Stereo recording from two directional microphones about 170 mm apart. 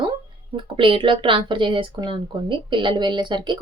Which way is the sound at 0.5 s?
30° right (ahead or behind).